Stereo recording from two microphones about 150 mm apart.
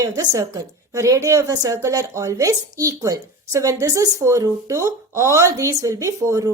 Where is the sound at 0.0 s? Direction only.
20° right (ahead or behind).